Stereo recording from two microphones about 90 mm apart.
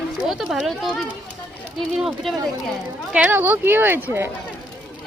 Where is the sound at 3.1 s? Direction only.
20° right (ahead or behind).